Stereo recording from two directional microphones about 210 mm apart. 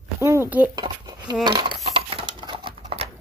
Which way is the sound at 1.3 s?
20° right (ahead or behind).